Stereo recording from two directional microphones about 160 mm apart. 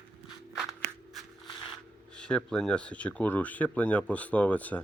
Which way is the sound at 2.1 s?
5° left (ahead or behind).